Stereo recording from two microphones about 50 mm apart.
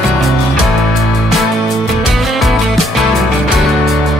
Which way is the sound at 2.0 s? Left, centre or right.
Centre.